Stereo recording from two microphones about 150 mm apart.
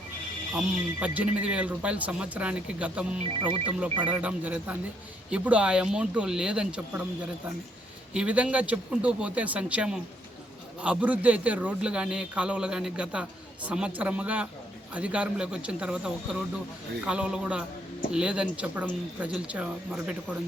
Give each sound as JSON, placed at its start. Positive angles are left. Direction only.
{"t": 0.5, "sound": "a man's voice", "side_deg": -10}
{"t": 3.4, "sound": "speech", "side_deg": -35}
{"t": 4.0, "sound": "a man's voice", "side_deg": -10}
{"t": 8.1, "sound": "a man's voice", "side_deg": -10}